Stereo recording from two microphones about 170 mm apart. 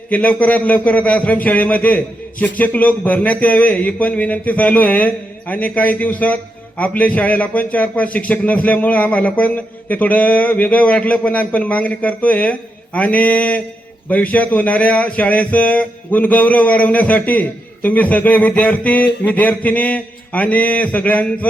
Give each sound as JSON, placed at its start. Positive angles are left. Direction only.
{"t": 0.1, "sound": "speech", "side_deg": 10}